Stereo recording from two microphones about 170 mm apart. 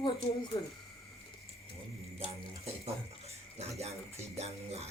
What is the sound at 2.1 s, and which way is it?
Speech, 35° right (ahead or behind).